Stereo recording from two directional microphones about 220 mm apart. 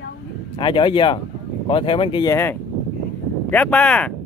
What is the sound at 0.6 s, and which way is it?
Speech, 20° left (ahead or behind).